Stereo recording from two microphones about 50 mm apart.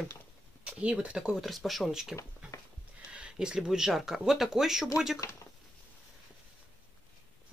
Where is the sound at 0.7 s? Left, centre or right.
Right.